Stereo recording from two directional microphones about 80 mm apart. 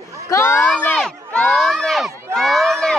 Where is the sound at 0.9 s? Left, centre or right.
Centre.